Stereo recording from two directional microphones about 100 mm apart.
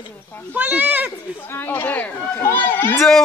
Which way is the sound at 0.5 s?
15° right (ahead or behind).